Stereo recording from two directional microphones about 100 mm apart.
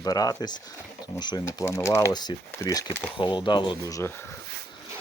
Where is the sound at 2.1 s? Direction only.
45° left (ahead or behind).